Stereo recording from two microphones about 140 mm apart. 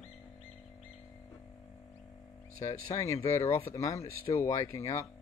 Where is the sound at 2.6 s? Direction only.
20° left (ahead or behind).